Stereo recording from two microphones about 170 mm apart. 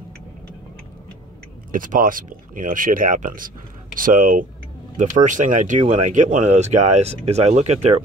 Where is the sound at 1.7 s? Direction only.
55° right (ahead or behind).